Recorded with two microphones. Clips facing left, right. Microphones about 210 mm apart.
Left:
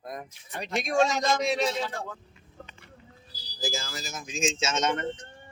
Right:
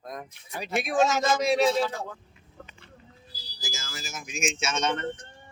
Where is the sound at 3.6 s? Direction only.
35° left (ahead or behind).